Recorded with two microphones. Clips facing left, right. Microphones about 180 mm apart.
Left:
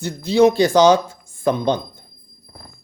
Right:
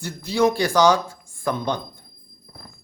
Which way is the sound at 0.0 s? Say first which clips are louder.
Left 6 dB; 20° left (ahead or behind).